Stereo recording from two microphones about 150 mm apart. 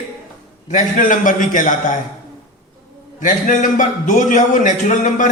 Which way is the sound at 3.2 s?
60° left (ahead or behind).